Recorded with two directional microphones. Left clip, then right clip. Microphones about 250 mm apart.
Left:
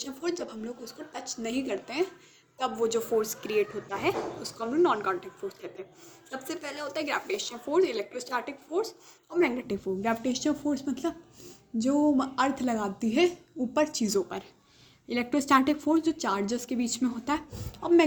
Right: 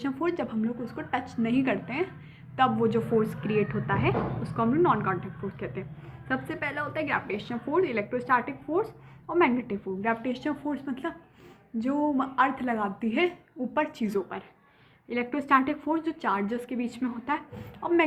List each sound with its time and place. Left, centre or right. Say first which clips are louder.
0.0 s a woman's voice: right 4 dB; left